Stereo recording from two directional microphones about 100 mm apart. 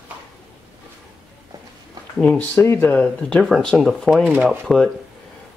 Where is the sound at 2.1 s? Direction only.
10° left (ahead or behind).